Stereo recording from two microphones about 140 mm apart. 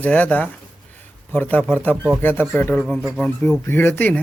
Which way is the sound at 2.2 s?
15° left (ahead or behind).